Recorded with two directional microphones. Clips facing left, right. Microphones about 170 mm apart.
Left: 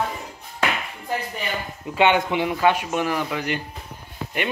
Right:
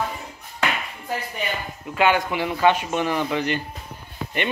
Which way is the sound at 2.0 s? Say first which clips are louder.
Left 1 dB; 25° left (ahead or behind).